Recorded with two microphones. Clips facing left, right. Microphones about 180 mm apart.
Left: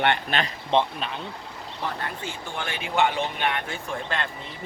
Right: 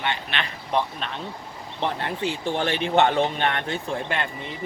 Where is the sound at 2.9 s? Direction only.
45° right (ahead or behind).